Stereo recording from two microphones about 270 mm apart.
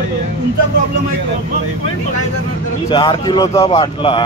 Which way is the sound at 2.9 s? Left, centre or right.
Centre.